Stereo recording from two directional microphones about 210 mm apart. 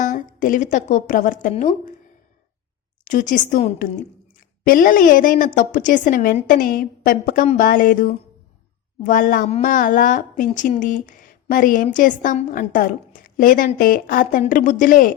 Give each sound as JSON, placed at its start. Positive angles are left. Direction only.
{"t": 0.0, "sound": "a woman's voice", "side_deg": 40}
{"t": 3.0, "sound": "speech", "side_deg": 35}